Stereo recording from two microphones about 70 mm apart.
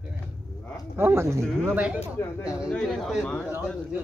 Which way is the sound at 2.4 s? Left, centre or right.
Centre.